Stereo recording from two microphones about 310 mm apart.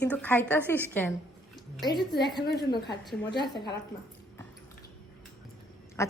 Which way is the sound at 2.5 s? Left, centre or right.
Left.